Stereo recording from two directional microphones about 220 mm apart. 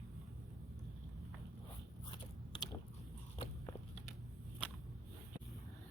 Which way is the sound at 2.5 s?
20° left (ahead or behind).